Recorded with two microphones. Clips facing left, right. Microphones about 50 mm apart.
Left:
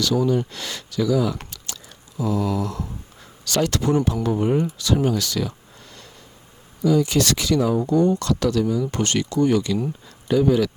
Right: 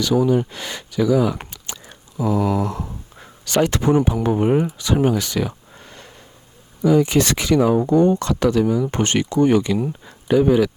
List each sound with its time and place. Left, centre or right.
0.0 s speech: centre